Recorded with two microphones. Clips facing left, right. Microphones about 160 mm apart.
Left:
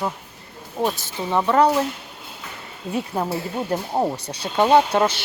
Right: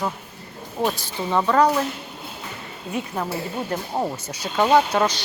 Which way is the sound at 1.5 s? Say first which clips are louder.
Left 1 dB; 25° left (ahead or behind).